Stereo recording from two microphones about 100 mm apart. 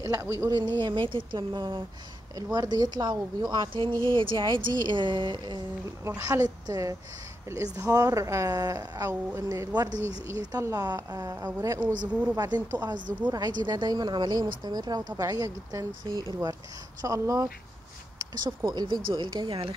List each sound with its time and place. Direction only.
0.0 s speech: 30° right (ahead or behind)
0.6 s speech: 45° right (ahead or behind)
2.3 s speech: 40° right (ahead or behind)
6.0 s a woman's voice: 30° right (ahead or behind)
11.8 s speech: 15° right (ahead or behind)
12.4 s speech: 40° right (ahead or behind)
17.0 s speech: 35° right (ahead or behind); by 19.7 s 65° right (ahead or behind)